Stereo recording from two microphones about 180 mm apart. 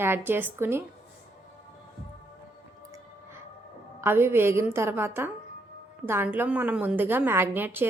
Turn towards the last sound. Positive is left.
turn(degrees=-10)  # may be behind; listen again after turning